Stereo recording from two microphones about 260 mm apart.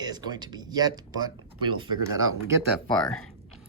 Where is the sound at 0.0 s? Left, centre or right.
Centre.